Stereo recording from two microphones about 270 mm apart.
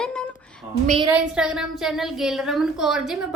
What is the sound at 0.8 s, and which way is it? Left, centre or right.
Speech, centre.